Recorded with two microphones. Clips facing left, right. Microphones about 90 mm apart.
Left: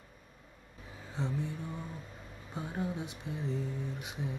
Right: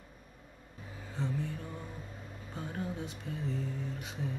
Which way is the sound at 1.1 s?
20° left (ahead or behind).